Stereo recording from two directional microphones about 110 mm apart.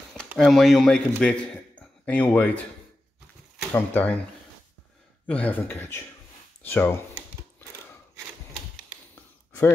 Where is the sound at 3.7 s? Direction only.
15° left (ahead or behind).